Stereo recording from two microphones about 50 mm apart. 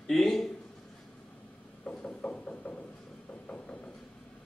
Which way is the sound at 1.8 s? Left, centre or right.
Left.